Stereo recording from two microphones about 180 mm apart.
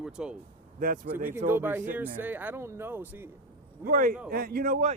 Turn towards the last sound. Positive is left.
turn(degrees=-45)  # may be behind; listen again after turning